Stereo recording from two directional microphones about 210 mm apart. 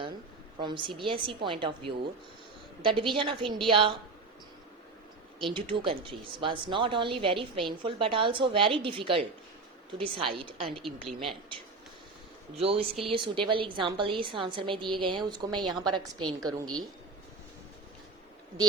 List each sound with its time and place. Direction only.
0.6 s speech: 20° right (ahead or behind)
5.4 s speech: 25° right (ahead or behind)
10.7 s speech: centre (ahead or behind)
12.5 s speech: 30° right (ahead or behind)